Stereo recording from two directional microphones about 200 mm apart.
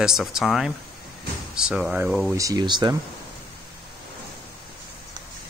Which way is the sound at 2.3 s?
15° right (ahead or behind).